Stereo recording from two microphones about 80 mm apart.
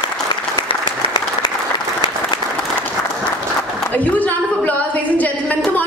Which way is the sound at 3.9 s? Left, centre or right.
Centre.